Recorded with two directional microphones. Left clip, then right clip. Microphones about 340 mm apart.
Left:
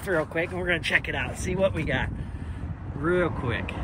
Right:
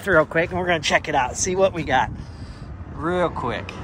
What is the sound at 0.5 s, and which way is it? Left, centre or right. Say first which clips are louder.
Speech: right 5 dB; right.